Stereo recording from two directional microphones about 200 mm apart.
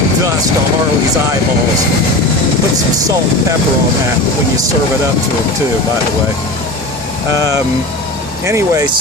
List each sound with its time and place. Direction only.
8.4 s speech: 15° right (ahead or behind)